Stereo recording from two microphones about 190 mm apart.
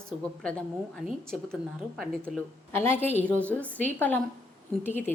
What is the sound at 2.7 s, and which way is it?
A woman's voice, 10° left (ahead or behind).